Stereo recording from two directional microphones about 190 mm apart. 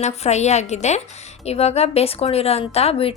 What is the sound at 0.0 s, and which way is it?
A woman's voice, 35° left (ahead or behind).